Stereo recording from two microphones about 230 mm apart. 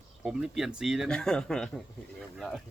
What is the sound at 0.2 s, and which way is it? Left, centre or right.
Speech, centre.